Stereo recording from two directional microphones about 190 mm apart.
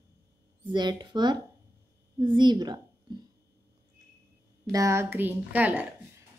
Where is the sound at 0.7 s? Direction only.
25° right (ahead or behind).